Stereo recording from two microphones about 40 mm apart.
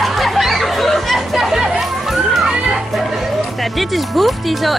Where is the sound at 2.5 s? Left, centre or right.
Centre.